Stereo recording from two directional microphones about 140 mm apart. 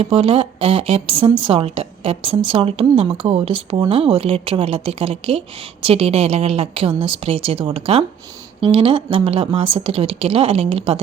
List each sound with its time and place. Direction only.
0.0 s a woman's voice: 40° right (ahead or behind)